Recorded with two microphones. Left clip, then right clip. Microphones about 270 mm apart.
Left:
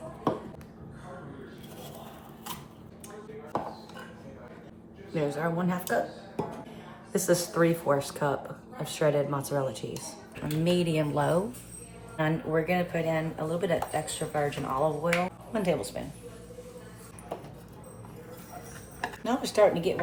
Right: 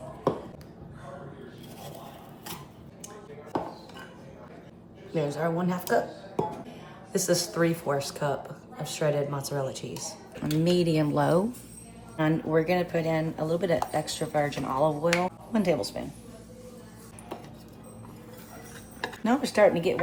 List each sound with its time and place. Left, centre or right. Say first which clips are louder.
5.1 s speech: right 1 dB; centre
7.1 s speech: even; centre
10.4 s speech: right 3 dB; right
19.2 s speech: right 2 dB; right